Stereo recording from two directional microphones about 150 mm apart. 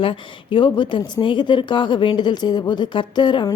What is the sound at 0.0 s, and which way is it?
Speech, 35° left (ahead or behind).